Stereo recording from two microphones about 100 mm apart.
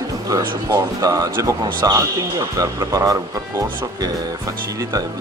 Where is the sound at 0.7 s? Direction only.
35° right (ahead or behind).